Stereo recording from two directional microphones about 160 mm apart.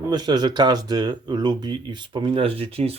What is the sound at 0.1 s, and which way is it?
Speech, 25° right (ahead or behind).